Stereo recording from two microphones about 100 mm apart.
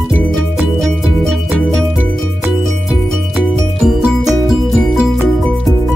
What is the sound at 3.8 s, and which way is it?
Music, 5° right (ahead or behind).